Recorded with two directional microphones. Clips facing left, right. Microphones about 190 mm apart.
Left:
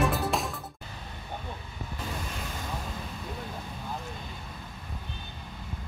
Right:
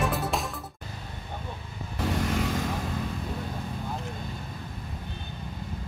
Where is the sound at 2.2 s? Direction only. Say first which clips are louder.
Right 10 dB; 90° right.